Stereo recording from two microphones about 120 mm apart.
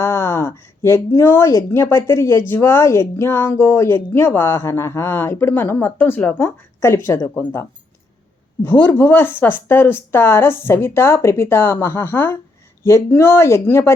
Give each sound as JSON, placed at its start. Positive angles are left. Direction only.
{"t": 0.0, "sound": "speech", "side_deg": 20}
{"t": 8.6, "sound": "speech", "side_deg": 15}